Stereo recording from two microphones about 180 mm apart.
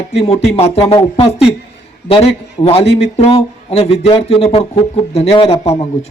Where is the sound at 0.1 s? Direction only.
35° left (ahead or behind).